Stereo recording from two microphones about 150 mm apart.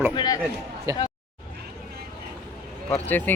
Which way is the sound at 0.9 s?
20° right (ahead or behind).